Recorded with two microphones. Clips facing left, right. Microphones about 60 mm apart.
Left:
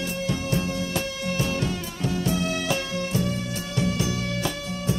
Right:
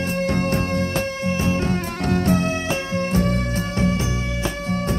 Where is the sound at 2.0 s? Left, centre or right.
Right.